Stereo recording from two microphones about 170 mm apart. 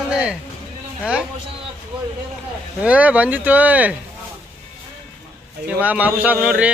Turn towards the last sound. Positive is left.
turn(degrees=-5)  # may be behind; listen again after turning